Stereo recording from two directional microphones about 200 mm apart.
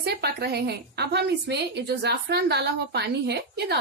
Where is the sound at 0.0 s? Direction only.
55° right (ahead or behind).